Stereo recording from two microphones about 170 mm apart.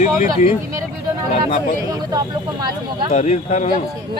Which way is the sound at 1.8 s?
20° right (ahead or behind).